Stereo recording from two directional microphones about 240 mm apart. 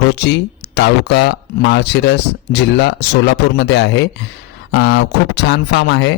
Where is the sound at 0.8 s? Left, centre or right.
Left.